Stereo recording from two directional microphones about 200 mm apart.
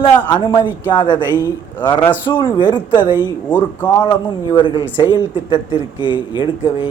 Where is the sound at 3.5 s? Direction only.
10° left (ahead or behind).